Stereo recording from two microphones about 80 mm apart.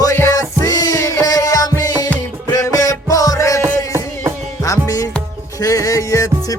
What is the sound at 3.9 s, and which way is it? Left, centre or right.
Music, right.